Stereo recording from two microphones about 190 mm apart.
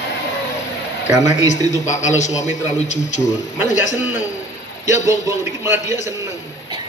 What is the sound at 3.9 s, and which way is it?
Speech, 90° left.